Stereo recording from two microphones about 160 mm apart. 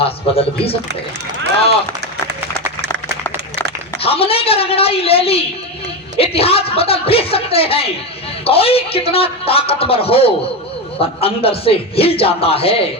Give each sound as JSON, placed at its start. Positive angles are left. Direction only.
{"t": 0.0, "sound": "speech", "side_deg": 35}
{"t": 4.0, "sound": "speech", "side_deg": 35}